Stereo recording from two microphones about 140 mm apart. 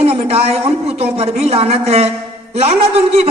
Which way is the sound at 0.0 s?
45° right (ahead or behind).